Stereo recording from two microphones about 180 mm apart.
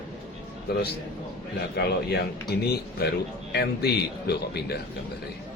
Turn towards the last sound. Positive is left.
turn(degrees=65)  # may be behind; listen again after turning